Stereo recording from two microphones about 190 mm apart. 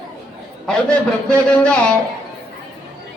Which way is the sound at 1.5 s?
5° left (ahead or behind).